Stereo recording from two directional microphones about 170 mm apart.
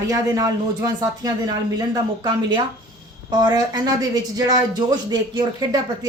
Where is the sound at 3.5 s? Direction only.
20° right (ahead or behind).